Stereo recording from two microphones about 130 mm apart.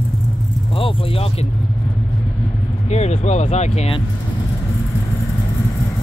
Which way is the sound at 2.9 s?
60° left (ahead or behind).